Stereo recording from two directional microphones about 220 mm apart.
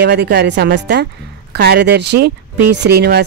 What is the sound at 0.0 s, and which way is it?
Speech, 45° right (ahead or behind).